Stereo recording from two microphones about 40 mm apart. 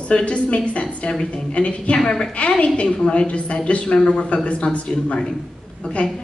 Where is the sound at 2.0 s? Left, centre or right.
Centre.